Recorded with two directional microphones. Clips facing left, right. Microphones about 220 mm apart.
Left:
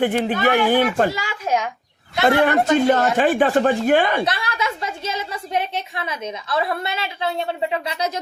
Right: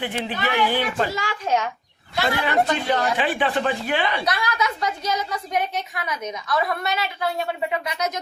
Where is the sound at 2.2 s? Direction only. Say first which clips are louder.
Left 6 dB; 55° left (ahead or behind).